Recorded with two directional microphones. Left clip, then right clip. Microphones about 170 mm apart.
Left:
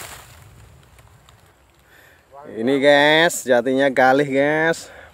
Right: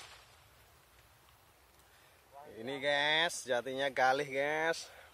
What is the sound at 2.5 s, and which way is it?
Speech, 5° left (ahead or behind).